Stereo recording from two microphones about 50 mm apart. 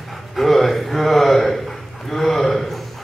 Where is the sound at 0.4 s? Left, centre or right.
Centre.